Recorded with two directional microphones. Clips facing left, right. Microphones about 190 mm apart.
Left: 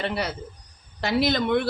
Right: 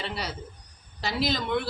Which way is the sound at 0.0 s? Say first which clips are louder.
Left 6 dB; 55° left (ahead or behind).